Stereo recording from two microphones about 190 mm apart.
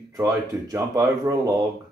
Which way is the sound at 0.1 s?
15° right (ahead or behind).